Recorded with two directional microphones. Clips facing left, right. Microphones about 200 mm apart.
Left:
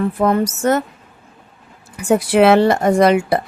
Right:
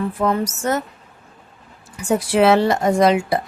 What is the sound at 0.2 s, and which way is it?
Speech, 55° left (ahead or behind).